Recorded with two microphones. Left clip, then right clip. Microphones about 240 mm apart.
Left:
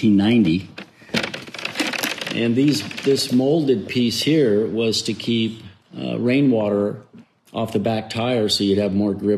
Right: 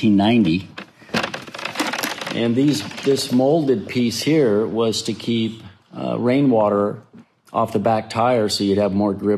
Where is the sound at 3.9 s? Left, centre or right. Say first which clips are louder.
Left 1 dB; right.